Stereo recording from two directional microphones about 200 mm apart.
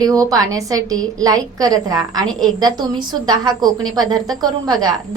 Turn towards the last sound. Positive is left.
turn(degrees=-20)  # may be behind; listen again after turning